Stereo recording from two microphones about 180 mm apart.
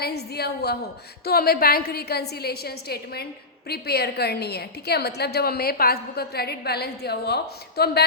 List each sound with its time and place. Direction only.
0.0 s a woman's voice: 60° left (ahead or behind)